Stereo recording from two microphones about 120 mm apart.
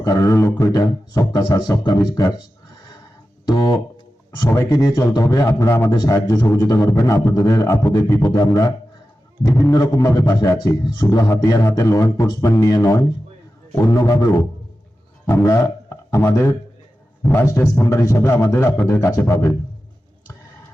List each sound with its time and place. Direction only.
0.0 s a man's voice: 25° left (ahead or behind)
3.4 s a man's voice: 35° left (ahead or behind)
15.3 s a man's voice: 25° left (ahead or behind)